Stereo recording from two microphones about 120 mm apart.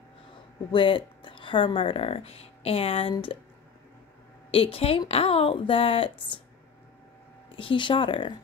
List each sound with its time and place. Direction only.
0.7 s speech: 45° left (ahead or behind)
4.5 s a woman's voice: 50° left (ahead or behind)
7.5 s a woman's voice: 45° left (ahead or behind)